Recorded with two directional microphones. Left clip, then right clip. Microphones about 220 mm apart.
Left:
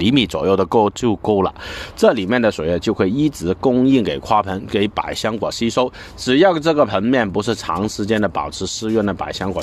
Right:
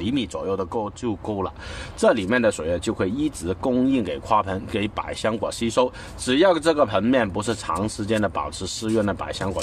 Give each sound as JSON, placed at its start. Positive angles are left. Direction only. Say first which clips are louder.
{"t": 0.0, "sound": "speech", "louder": "left 9 dB", "side_deg": 40}